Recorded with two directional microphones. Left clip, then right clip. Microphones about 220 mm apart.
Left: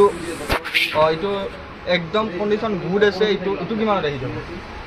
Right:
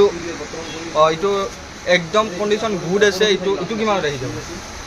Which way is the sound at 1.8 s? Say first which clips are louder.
Right 4 dB; 30° right (ahead or behind).